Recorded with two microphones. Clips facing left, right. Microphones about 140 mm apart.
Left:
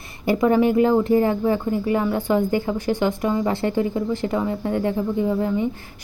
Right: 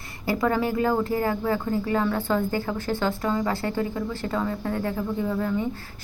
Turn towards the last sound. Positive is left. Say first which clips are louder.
# left 4 dB
turn(degrees=20)  # may be behind; listen again after turning